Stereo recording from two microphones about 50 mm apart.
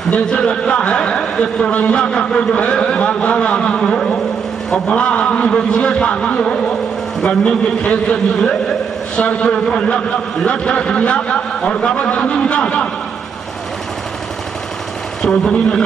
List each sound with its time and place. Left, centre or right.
0.1 s a man's voice: centre
7.8 s a man's voice: left
15.2 s speech: centre